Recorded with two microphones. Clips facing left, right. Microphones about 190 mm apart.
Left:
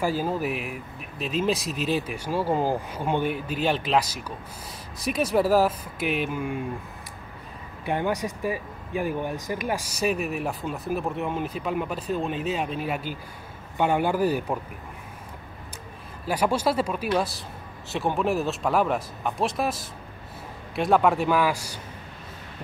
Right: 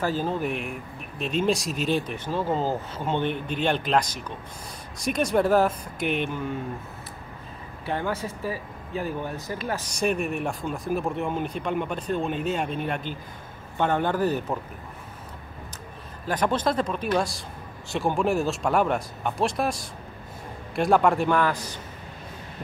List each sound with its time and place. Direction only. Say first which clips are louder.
0.0 s speech: left 1 dB; 10° left (ahead or behind)
7.8 s speech: left 2 dB; 15° left (ahead or behind)
16.3 s speech: left 1 dB; 10° left (ahead or behind)